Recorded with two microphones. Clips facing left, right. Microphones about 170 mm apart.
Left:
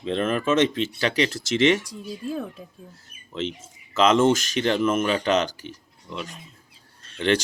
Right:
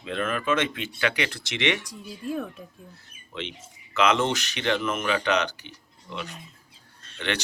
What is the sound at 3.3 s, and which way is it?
Speech, 40° left (ahead or behind).